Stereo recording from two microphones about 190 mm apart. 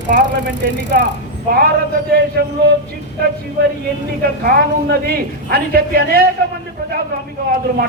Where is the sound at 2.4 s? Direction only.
60° right (ahead or behind).